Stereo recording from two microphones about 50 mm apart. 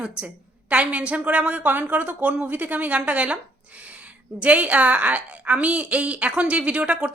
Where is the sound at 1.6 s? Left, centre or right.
Right.